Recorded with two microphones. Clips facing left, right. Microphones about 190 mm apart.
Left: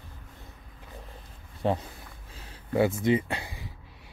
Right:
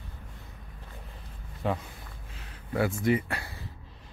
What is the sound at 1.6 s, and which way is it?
Speech, 30° left (ahead or behind).